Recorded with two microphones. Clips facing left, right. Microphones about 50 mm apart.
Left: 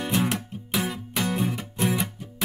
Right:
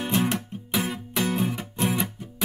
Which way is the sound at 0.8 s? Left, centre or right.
Centre.